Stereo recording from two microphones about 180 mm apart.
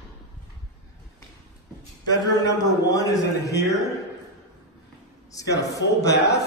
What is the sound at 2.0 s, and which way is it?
A man's voice, 20° left (ahead or behind).